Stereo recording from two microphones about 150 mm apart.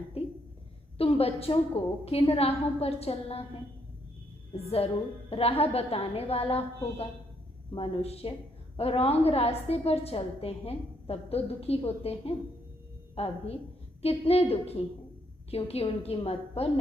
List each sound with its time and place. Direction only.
0.9 s a woman's voice: 40° left (ahead or behind)
5.3 s a woman's voice: 40° left (ahead or behind)